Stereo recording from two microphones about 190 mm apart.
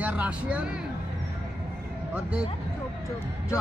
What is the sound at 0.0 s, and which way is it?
Speech, 5° right (ahead or behind).